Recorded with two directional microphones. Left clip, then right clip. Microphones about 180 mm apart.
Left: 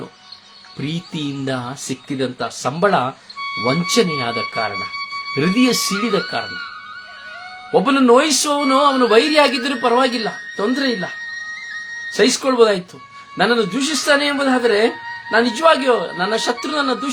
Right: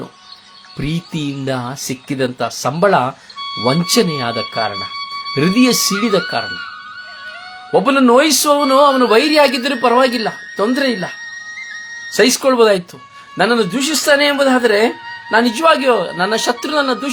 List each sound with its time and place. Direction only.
0.8 s a man's voice: 35° right (ahead or behind)
3.4 s music: 15° right (ahead or behind)
3.7 s a man's voice: 35° right (ahead or behind)
4.7 s music: 20° right (ahead or behind)
5.4 s a man's voice: 35° right (ahead or behind)
6.4 s speech: 20° right (ahead or behind)
7.7 s a man's voice: 35° right (ahead or behind)
12.1 s a man's voice: 35° right (ahead or behind)